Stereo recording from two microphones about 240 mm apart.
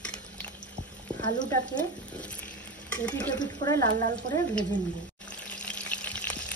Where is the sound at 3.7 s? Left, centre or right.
Right.